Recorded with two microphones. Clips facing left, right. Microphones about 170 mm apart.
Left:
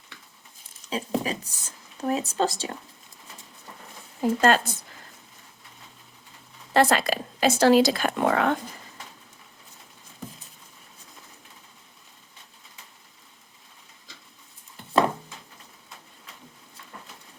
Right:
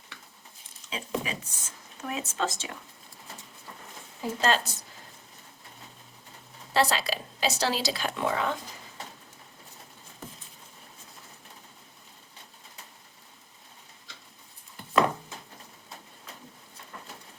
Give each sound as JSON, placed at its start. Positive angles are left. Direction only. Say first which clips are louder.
{"t": 0.9, "sound": "speech", "louder": "left 5 dB", "side_deg": 40}
{"t": 4.2, "sound": "speech", "louder": "left 6 dB", "side_deg": 50}
{"t": 6.7, "sound": "speech", "louder": "left 5 dB", "side_deg": 55}